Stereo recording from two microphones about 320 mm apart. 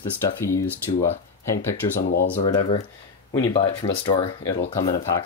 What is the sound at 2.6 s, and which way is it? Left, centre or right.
Speech, centre.